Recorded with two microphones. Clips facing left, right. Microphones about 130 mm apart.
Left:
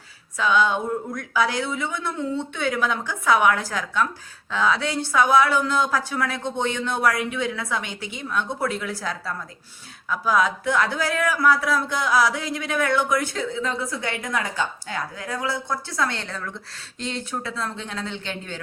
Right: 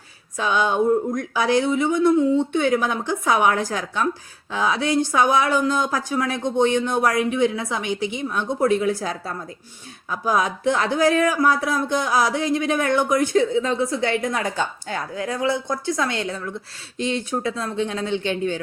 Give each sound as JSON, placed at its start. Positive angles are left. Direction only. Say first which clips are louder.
{"t": 0.3, "sound": "a woman's voice", "louder": "right 1 dB", "side_deg": -20}